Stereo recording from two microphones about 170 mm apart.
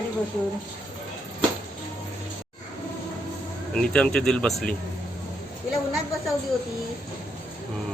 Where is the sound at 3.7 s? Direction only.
5° left (ahead or behind).